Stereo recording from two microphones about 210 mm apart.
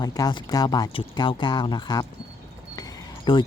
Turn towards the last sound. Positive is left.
turn(degrees=20)  # may be behind; listen again after turning